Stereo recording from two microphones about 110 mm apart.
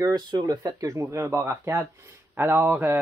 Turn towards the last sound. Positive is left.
turn(degrees=-20)  # may be behind; listen again after turning